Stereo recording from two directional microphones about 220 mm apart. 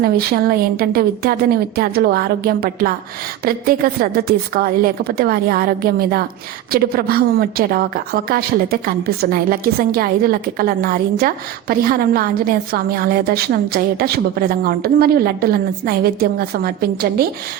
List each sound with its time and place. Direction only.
0.0 s a woman's voice: 45° right (ahead or behind)